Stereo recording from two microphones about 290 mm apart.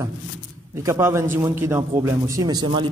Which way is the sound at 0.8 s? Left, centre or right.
Centre.